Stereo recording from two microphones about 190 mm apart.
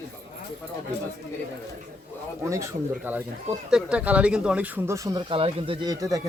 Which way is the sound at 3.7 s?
5° right (ahead or behind).